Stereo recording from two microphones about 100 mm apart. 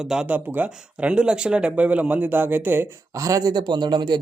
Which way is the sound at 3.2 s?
35° right (ahead or behind).